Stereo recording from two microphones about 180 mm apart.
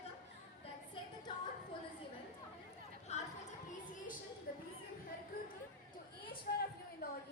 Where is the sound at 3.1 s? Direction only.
35° left (ahead or behind).